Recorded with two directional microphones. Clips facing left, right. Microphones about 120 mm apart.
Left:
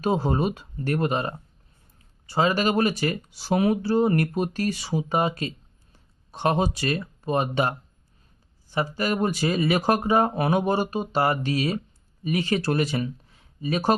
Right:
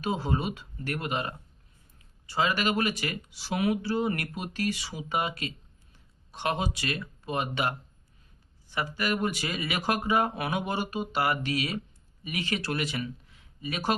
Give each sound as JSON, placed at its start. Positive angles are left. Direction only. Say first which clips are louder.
{"t": 0.0, "sound": "speech", "louder": "left 6 dB", "side_deg": 40}